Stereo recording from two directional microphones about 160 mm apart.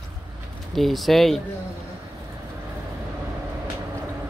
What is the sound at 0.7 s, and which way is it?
Speech, centre (ahead or behind).